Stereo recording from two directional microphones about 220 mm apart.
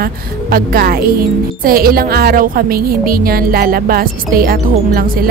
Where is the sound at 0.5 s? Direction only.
40° right (ahead or behind).